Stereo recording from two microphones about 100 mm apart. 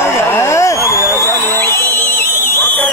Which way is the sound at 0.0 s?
25° left (ahead or behind).